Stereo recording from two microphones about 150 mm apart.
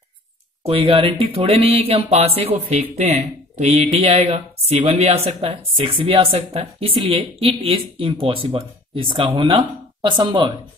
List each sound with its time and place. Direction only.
0.7 s speech: 40° right (ahead or behind)